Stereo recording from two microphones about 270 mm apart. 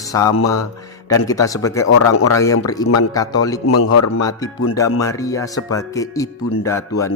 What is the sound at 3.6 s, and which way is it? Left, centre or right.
Speech, left.